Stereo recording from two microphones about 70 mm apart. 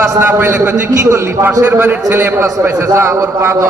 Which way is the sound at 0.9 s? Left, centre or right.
Right.